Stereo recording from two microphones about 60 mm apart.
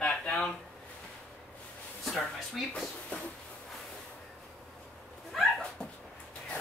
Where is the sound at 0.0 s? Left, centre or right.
Centre.